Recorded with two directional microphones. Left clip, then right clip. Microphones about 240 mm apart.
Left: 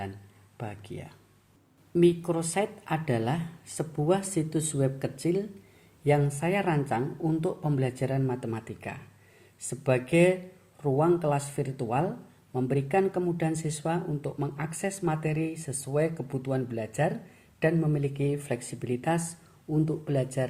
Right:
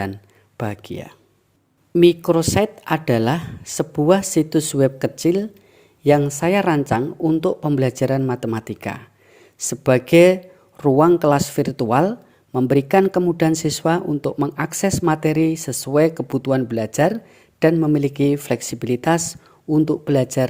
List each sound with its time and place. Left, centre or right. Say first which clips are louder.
0.5 s speech: right 12 dB; right